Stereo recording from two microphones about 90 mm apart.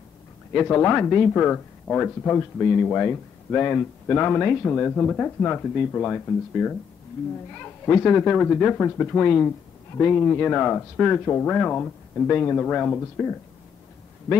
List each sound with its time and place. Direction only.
0.7 s speech: 20° left (ahead or behind)
5.0 s speech: 10° left (ahead or behind)
5.4 s speech: 20° left (ahead or behind)
9.9 s speech: 25° left (ahead or behind)
12.9 s speech: 30° left (ahead or behind)